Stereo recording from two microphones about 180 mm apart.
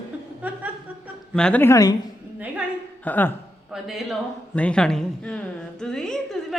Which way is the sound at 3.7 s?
Centre (ahead or behind).